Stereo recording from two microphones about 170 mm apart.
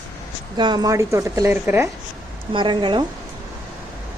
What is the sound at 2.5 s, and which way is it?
Speech, 30° right (ahead or behind).